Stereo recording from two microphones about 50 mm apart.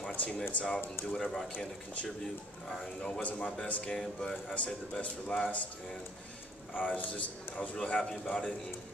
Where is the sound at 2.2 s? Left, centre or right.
Centre.